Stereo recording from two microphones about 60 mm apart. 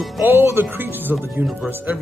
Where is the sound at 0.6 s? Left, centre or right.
Right.